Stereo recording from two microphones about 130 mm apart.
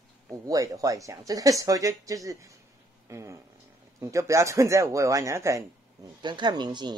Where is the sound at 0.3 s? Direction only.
25° right (ahead or behind).